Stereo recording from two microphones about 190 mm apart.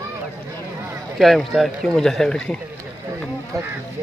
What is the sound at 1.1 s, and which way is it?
Speech, centre (ahead or behind).